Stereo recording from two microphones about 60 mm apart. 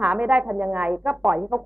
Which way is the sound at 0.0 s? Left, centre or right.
Right.